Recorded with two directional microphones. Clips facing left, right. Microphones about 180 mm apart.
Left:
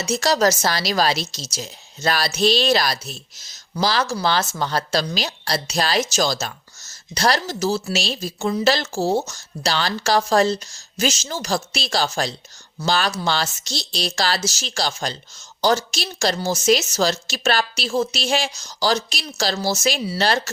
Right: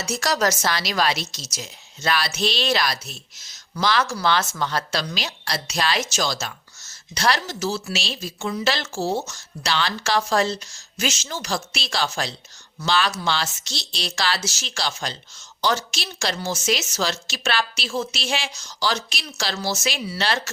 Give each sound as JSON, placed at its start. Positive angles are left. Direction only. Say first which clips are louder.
{"t": 0.0, "sound": "speech", "louder": "left 4 dB", "side_deg": 25}